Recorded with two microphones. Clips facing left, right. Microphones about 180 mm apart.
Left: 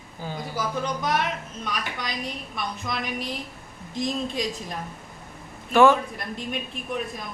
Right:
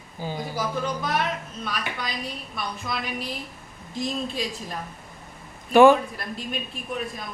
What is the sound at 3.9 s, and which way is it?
Speech, 20° left (ahead or behind).